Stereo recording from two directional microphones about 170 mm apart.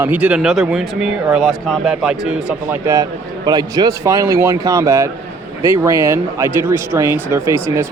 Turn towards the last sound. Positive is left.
turn(degrees=-15)  # may be behind; listen again after turning